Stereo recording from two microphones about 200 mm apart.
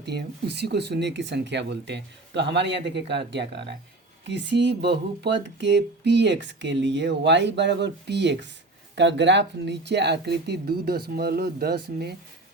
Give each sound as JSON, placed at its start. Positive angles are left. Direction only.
{"t": 0.0, "sound": "speech", "side_deg": -55}